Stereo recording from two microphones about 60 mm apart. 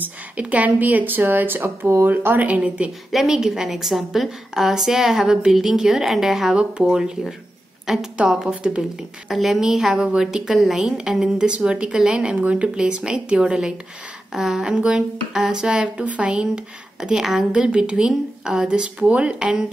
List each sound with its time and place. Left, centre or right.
0.0 s speech: right
3.1 s a woman's voice: centre
6.5 s a woman's voice: centre
14.7 s speech: centre